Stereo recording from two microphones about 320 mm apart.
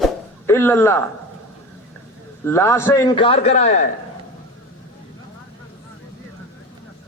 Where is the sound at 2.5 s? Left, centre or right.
Centre.